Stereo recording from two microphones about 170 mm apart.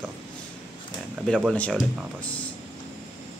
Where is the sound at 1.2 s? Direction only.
Centre (ahead or behind).